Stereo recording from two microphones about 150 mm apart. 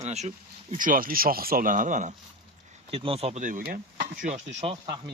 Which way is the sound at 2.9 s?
40° right (ahead or behind).